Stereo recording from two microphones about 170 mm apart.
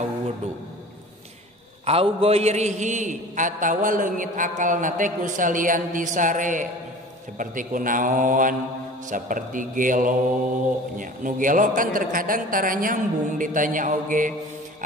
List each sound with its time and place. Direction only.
1.9 s a man's voice: 35° right (ahead or behind); by 14.3 s 50° right (ahead or behind)